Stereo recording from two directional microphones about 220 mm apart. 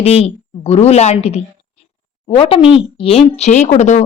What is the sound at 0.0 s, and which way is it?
A woman's voice, 25° left (ahead or behind).